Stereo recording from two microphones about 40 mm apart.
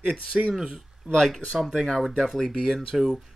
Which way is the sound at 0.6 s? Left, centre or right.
Centre.